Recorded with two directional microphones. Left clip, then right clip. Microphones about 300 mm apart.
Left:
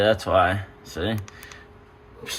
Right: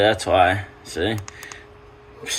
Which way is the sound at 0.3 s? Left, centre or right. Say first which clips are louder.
Right 3 dB; centre.